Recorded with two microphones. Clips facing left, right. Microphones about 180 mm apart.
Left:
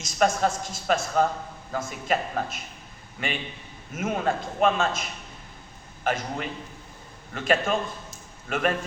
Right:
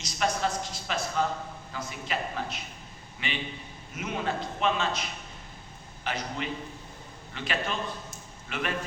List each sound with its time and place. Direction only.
0.0 s a man's voice: 45° left (ahead or behind)
6.1 s a man's voice: 50° left (ahead or behind)